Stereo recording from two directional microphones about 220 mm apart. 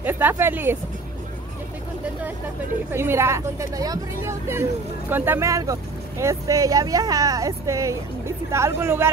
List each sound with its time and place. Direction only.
0.0 s speech: 10° right (ahead or behind)
2.9 s speech: 10° right (ahead or behind)